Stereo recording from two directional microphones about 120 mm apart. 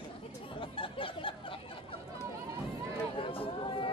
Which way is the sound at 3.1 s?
45° left (ahead or behind).